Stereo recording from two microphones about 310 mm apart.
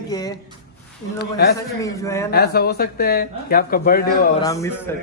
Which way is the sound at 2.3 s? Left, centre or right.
Left.